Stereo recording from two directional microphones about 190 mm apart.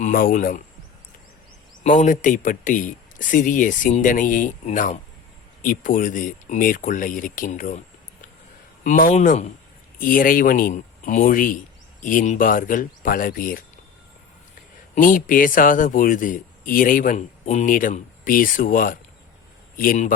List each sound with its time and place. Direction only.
0.0 s speech: 50° left (ahead or behind)
1.8 s speech: 40° left (ahead or behind)
8.8 s speech: 45° left (ahead or behind)
14.9 s speech: 45° left (ahead or behind)